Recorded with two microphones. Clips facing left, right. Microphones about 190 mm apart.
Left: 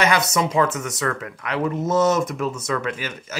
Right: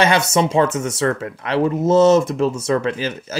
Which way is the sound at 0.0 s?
30° right (ahead or behind).